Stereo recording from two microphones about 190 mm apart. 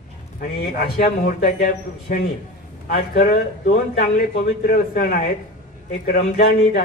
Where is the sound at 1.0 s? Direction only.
45° left (ahead or behind).